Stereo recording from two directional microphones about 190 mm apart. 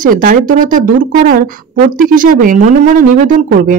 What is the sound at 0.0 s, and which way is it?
Speech, 45° right (ahead or behind).